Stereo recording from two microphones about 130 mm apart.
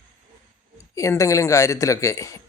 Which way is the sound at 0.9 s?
25° left (ahead or behind).